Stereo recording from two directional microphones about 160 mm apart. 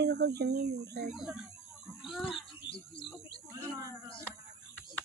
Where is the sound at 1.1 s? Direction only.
5° right (ahead or behind).